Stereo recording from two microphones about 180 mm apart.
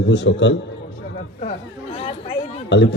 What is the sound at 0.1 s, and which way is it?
Speech, 80° left.